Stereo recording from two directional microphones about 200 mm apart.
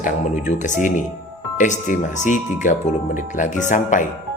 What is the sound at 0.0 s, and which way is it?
Speech, 40° left (ahead or behind).